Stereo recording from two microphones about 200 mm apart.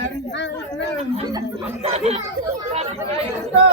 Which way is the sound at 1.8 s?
30° right (ahead or behind).